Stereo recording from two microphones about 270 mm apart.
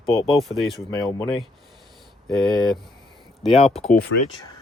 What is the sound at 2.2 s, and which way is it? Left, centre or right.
Speech, centre.